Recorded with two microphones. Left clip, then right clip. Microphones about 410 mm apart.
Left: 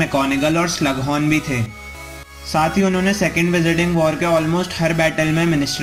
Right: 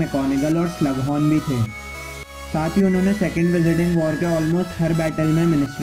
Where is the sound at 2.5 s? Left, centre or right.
Left.